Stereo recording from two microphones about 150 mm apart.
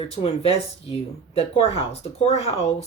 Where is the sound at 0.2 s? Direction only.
40° left (ahead or behind).